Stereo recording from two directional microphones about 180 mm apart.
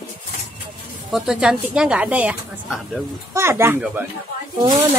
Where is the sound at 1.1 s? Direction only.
5° right (ahead or behind).